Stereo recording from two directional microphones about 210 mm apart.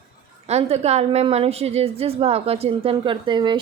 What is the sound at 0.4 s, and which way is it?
A woman's voice, 30° right (ahead or behind).